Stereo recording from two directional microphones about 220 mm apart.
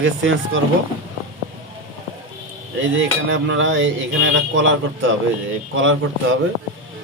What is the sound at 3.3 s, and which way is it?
A man's voice, 60° right (ahead or behind).